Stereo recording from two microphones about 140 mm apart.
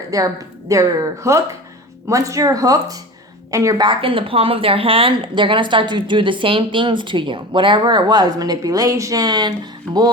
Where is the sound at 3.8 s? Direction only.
40° right (ahead or behind).